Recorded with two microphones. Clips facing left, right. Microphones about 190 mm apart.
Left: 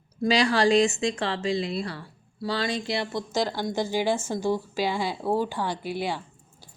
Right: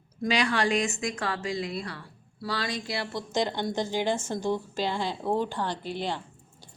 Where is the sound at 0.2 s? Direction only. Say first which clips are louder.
Left 4 dB; 30° left (ahead or behind); by 6.2 s 10° left (ahead or behind).